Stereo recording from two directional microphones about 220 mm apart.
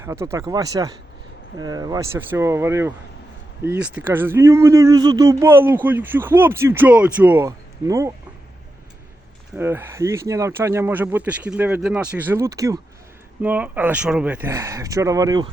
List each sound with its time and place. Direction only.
0.0 s speech: 10° right (ahead or behind)
9.6 s speech: 10° right (ahead or behind)